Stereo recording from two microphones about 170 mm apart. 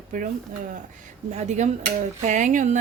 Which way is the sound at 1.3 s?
45° right (ahead or behind).